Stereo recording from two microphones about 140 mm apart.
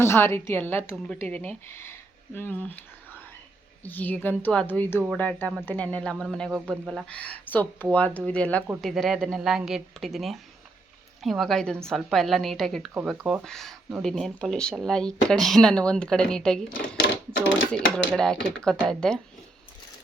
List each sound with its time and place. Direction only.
0.0 s a woman's voice: 15° left (ahead or behind); by 7.0 s centre (ahead or behind)
7.1 s a woman's voice: 10° left (ahead or behind)